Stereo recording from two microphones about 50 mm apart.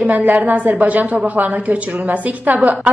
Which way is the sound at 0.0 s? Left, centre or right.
Right.